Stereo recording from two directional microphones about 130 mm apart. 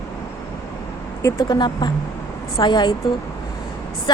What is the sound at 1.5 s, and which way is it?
Speech, 35° left (ahead or behind).